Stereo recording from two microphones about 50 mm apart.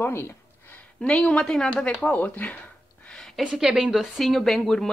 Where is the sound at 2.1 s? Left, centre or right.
Left.